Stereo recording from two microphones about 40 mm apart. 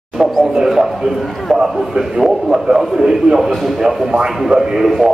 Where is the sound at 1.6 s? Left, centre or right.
Centre.